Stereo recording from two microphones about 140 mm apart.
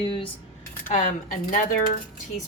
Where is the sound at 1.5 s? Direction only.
75° left (ahead or behind).